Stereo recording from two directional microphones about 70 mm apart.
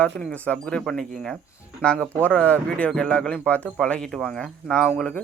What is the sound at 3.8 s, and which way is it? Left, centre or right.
Speech, centre.